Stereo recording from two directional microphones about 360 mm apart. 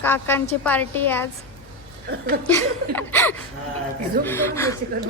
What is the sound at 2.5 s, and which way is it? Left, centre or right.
Speech, centre.